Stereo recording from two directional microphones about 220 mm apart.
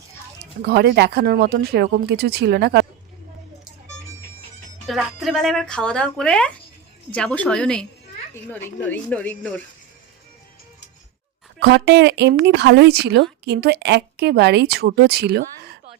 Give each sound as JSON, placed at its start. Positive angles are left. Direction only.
{"t": 0.7, "sound": "speech", "side_deg": -50}
{"t": 4.9, "sound": "speech", "side_deg": 0}
{"t": 11.6, "sound": "speech", "side_deg": -50}